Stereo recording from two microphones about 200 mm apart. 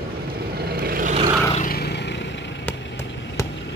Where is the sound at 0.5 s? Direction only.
50° right (ahead or behind).